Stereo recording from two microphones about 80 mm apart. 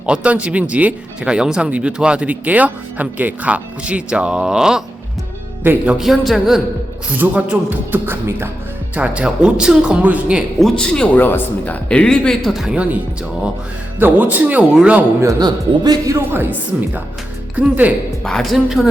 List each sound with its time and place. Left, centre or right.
0.0 s speech: centre
5.6 s speech: right
6.0 s a woman's voice: centre
7.2 s speech: centre
9.0 s speech: centre
10.6 s speech: centre; by 11.8 s left
11.9 s speech: centre
12.7 s speech: centre
14.0 s speech: right
14.7 s speech: centre
15.4 s a man's voice: right
16.1 s speech: right
18.2 s a woman's voice: centre